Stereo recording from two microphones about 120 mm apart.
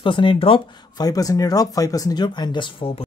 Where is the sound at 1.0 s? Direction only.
30° left (ahead or behind).